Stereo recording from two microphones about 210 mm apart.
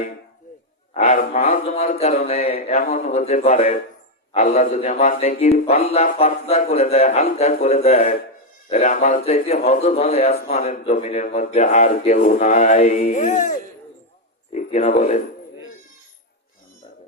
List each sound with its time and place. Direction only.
0.9 s a man's voice: 35° left (ahead or behind)